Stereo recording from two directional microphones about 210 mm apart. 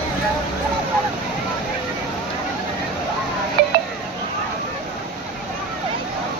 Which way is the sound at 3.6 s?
50° right (ahead or behind).